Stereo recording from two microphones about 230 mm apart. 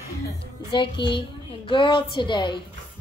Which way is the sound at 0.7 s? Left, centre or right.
Left.